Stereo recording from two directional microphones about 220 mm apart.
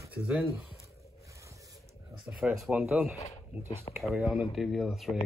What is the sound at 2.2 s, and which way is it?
Speech, 5° right (ahead or behind).